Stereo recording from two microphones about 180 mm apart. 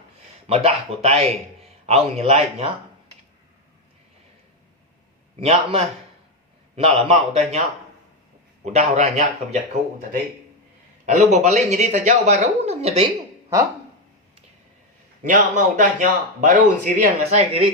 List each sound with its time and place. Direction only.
0.4 s a man's voice: 35° right (ahead or behind)
5.4 s a man's voice: 35° right (ahead or behind)
8.6 s a man's voice: 40° right (ahead or behind)
11.0 s a man's voice: 40° right (ahead or behind)
15.2 s speech: 45° right (ahead or behind)